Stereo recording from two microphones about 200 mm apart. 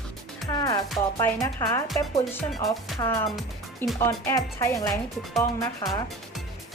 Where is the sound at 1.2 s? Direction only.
15° left (ahead or behind).